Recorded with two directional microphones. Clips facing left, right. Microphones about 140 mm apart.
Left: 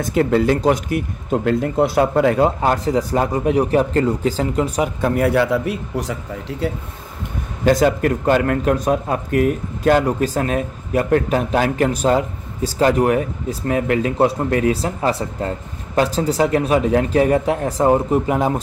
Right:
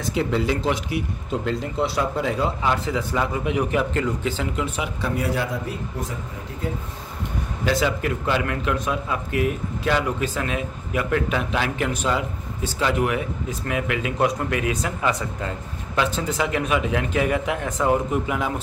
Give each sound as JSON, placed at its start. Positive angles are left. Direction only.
{"t": 0.0, "sound": "speech", "side_deg": 50}
{"t": 7.6, "sound": "a man's voice", "side_deg": 50}